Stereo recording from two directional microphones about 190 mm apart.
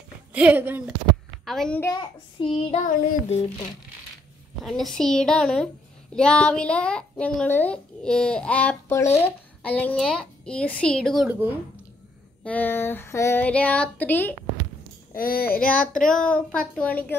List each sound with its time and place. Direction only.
0.3 s a woman's voice: 5° right (ahead or behind)
1.4 s a child's voice: centre (ahead or behind)
1.8 s child singing: 20° left (ahead or behind)
2.8 s music: 45° left (ahead or behind)
4.6 s speech: centre (ahead or behind)
12.4 s a sound: 10° left (ahead or behind)
15.1 s music: 50° left (ahead or behind)
15.6 s a sound: 5° left (ahead or behind)